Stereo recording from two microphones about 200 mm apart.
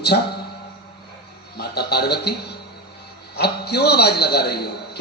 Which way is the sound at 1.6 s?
55° left (ahead or behind).